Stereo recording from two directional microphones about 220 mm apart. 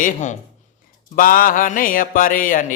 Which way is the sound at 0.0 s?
35° left (ahead or behind).